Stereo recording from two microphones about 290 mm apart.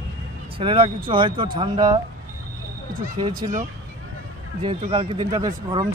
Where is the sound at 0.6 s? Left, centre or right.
Centre.